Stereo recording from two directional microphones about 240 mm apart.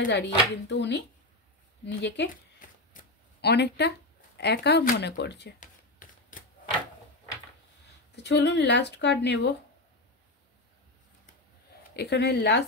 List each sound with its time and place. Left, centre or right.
0.1 s speech: left
1.9 s shuffling cards: left
4.4 s speech: left
8.2 s speech: left
11.9 s speech: left